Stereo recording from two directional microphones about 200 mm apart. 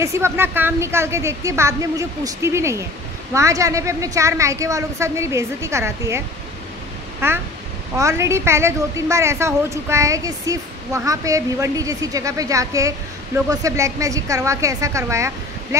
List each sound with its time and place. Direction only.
0.0 s a woman's voice: 15° right (ahead or behind)